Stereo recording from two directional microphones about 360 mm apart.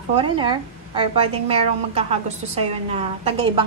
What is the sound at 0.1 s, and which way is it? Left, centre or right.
A woman's voice, centre.